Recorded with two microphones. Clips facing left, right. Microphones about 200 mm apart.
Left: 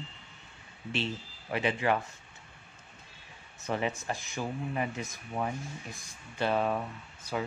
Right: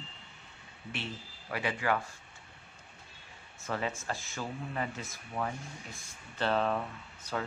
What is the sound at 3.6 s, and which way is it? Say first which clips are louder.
Speech: left 3 dB; 20° left (ahead or behind).